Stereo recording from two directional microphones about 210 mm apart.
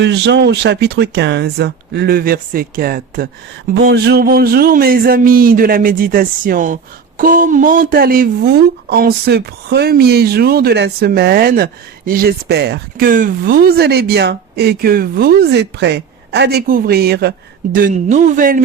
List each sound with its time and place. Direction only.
0.0 s speech: 55° right (ahead or behind); by 18.6 s 40° right (ahead or behind)